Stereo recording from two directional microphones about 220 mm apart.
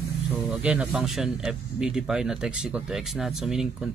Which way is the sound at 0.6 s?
5° right (ahead or behind).